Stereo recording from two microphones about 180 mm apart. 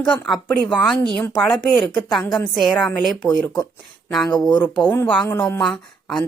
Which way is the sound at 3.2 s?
15° left (ahead or behind).